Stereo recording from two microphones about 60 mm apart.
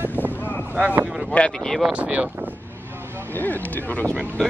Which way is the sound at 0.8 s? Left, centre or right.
Right.